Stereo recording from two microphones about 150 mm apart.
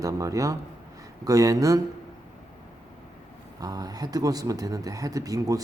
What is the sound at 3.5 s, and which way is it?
Speech, 25° right (ahead or behind).